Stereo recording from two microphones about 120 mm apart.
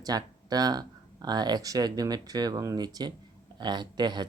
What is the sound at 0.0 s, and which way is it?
Speech, 35° right (ahead or behind).